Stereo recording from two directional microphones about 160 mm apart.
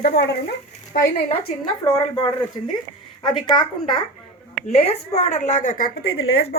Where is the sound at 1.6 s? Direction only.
35° left (ahead or behind); by 5.9 s 55° left (ahead or behind).